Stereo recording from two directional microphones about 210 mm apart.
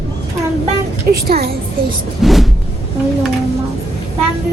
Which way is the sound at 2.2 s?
Centre (ahead or behind).